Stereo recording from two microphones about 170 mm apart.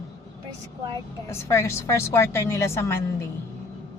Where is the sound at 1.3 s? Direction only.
15° left (ahead or behind).